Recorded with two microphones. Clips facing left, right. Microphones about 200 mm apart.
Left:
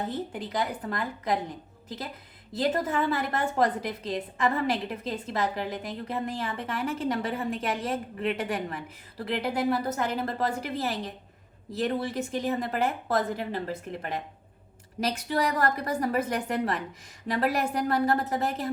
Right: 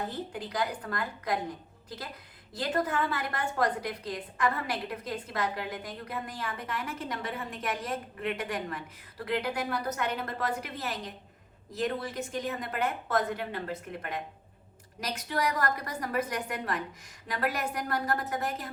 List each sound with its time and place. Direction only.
0.3 s a woman's voice: 25° left (ahead or behind)
2.5 s a woman's voice: 25° left (ahead or behind)